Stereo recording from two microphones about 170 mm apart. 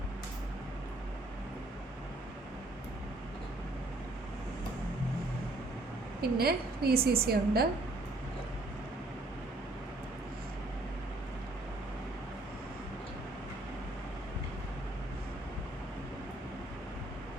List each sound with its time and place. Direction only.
6.2 s a woman's voice: 65° right (ahead or behind)